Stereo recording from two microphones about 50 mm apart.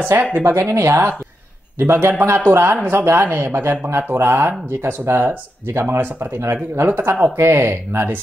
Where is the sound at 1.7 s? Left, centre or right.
Right.